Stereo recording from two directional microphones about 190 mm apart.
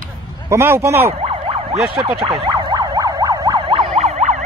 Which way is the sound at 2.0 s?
25° right (ahead or behind).